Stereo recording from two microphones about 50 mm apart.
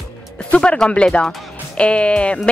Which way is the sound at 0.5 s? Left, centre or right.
Left.